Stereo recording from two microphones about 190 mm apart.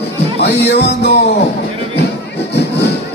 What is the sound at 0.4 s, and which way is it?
Speech, 60° left (ahead or behind).